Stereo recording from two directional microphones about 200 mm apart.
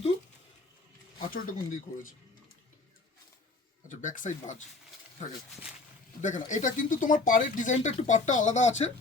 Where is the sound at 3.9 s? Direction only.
40° left (ahead or behind).